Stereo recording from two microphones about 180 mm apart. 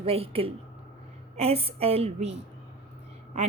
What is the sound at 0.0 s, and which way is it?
Speech, 30° right (ahead or behind).